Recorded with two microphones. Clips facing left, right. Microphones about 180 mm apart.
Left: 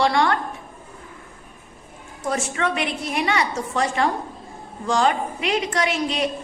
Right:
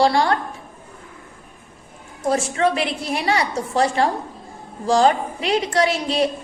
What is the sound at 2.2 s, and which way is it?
A woman's voice, 30° right (ahead or behind).